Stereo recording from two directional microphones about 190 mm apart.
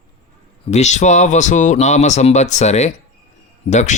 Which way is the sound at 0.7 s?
35° left (ahead or behind).